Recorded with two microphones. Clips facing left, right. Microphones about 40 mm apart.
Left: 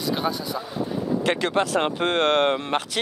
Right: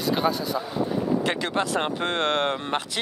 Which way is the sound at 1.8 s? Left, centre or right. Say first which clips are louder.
Left 3 dB; left.